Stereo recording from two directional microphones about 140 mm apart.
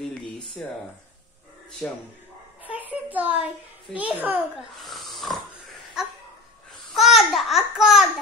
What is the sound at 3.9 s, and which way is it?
Speech, 10° right (ahead or behind).